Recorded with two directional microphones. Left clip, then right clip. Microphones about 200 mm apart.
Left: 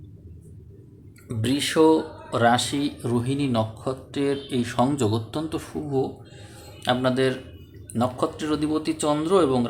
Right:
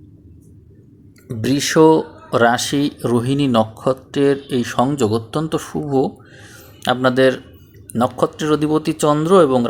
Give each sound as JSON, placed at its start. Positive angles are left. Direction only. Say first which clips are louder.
{"t": 1.3, "sound": "speech", "louder": "right 7 dB", "side_deg": -25}
{"t": 6.5, "sound": "a sound", "louder": "right 5 dB", "side_deg": -35}
{"t": 7.9, "sound": "speech", "louder": "right 7 dB", "side_deg": -30}